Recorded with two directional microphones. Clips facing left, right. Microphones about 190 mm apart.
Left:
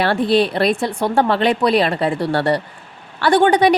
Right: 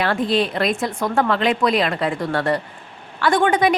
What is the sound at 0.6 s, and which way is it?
Speech, 35° left (ahead or behind).